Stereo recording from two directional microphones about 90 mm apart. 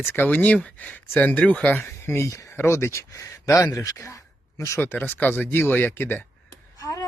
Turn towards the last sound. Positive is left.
turn(degrees=35)  # may be behind; listen again after turning